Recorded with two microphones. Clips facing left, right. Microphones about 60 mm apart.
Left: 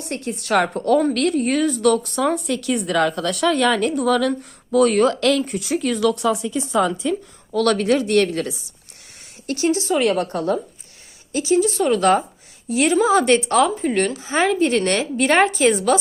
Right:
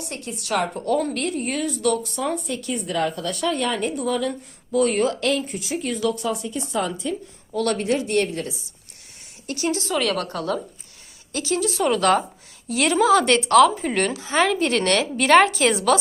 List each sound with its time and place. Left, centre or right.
0.0 s a woman's voice: left
5.4 s speech: left
7.5 s speech: left
9.5 s speech: left
9.7 s speech: left
11.3 s speech: centre
11.5 s a woman's voice: centre